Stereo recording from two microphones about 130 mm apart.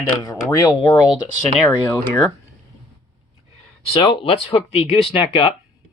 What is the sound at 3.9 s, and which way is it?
Speech, 40° left (ahead or behind).